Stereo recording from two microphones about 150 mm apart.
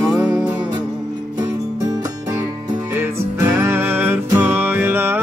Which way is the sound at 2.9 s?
15° right (ahead or behind).